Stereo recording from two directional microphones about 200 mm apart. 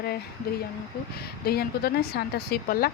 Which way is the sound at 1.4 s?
50° left (ahead or behind).